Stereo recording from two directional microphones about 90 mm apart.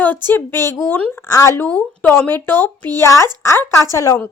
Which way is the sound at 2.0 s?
20° left (ahead or behind).